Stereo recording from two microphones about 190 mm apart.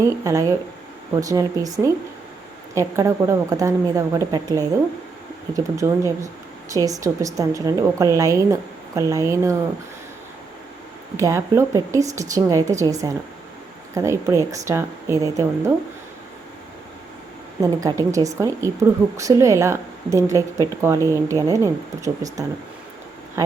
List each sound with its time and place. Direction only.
0.0 s speech: 15° right (ahead or behind)
11.2 s speech: 15° right (ahead or behind)
17.6 s speech: 15° right (ahead or behind)